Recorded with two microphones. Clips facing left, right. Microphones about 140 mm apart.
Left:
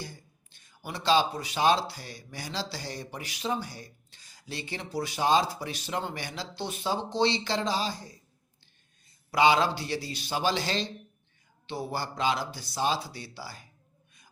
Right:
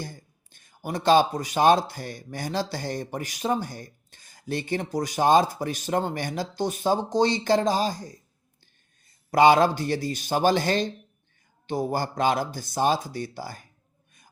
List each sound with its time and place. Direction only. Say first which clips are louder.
0.0 s speech: right 4 dB; 50° right (ahead or behind)
9.3 s speech: right 6 dB; 50° right (ahead or behind)